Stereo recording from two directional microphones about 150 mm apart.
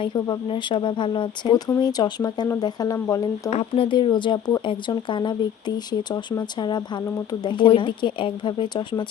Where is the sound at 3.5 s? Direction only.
45° left (ahead or behind).